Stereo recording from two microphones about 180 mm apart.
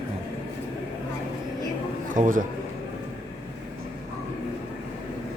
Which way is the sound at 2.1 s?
45° right (ahead or behind).